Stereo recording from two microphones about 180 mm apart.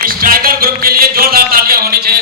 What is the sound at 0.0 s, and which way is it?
Music, 55° right (ahead or behind).